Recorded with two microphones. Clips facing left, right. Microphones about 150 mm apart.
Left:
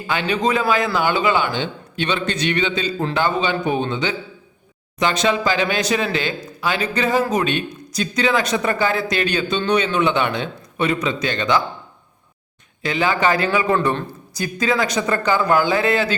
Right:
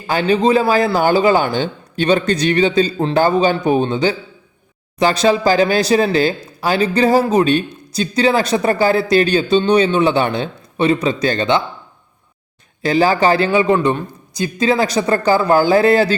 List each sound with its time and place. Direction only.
0.1 s speech: 35° right (ahead or behind)
12.8 s speech: 35° right (ahead or behind)
13.7 s speech: 15° right (ahead or behind); by 16.1 s 35° right (ahead or behind)